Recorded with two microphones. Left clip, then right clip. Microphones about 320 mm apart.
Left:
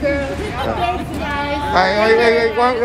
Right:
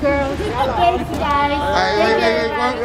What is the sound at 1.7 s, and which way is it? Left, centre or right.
Speech, centre.